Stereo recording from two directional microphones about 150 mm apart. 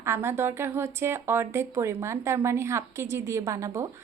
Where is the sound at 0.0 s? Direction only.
15° right (ahead or behind).